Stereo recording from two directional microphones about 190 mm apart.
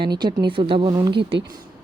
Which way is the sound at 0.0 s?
25° right (ahead or behind).